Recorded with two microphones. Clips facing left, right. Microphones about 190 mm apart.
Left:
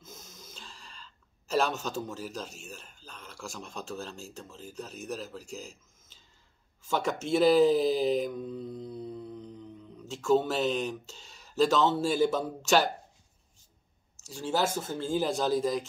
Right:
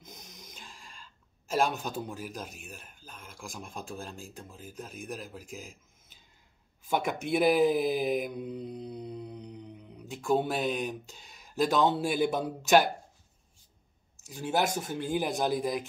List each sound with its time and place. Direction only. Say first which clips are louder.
0.0 s a sound: left 1 dB; 15° right (ahead or behind)
1.7 s a man's voice: left 1 dB; 15° right (ahead or behind)
6.9 s speech: left 1 dB; 15° right (ahead or behind)
14.2 s a man's voice: even; 15° right (ahead or behind)